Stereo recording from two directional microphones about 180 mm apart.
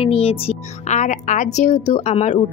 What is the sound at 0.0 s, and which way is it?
Speech, 35° left (ahead or behind).